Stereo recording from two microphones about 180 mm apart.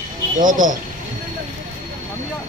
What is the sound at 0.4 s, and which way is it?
Speech, 45° right (ahead or behind).